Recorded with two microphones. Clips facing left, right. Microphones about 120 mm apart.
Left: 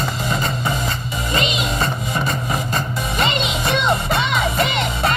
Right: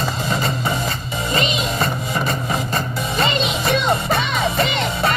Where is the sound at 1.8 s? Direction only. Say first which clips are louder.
Even; 25° left (ahead or behind).